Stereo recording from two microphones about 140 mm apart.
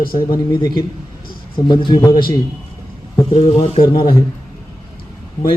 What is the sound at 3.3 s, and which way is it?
Speech, 45° left (ahead or behind).